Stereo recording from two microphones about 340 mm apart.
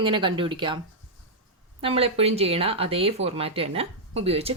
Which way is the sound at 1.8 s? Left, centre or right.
Centre.